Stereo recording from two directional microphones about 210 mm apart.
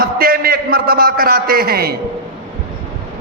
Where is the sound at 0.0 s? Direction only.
45° right (ahead or behind).